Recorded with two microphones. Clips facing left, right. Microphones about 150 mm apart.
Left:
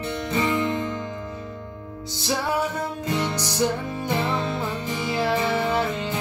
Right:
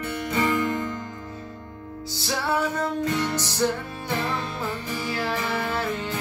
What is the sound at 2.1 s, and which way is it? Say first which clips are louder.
Music: left 1 dB; 20° left (ahead or behind).